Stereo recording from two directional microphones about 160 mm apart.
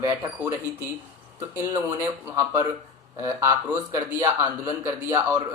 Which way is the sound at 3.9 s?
15° right (ahead or behind).